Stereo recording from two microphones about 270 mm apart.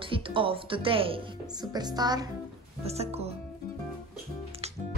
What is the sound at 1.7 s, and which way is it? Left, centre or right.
Music, centre.